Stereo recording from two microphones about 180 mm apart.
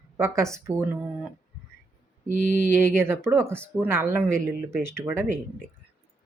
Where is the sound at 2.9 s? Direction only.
15° right (ahead or behind).